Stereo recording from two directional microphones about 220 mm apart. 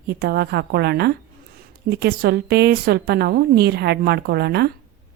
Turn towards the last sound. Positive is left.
turn(degrees=-50)  # may be behind; listen again after turning